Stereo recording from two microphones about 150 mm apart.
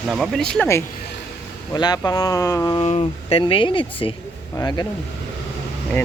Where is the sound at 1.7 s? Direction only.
25° left (ahead or behind).